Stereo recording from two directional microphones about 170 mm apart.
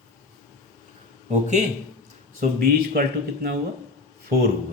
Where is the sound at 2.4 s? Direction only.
60° right (ahead or behind).